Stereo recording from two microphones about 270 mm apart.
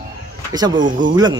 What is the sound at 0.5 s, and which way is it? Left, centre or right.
Speech, centre.